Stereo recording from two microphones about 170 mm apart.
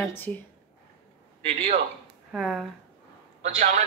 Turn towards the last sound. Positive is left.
turn(degrees=-45)  # may be behind; listen again after turning